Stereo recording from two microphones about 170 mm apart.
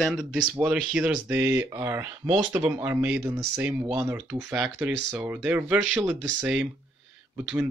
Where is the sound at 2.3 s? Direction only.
25° right (ahead or behind).